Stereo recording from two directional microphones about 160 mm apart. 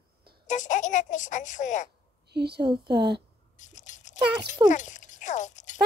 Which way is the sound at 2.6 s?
30° right (ahead or behind).